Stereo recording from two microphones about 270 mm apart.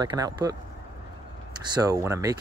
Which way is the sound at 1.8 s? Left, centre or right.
Centre.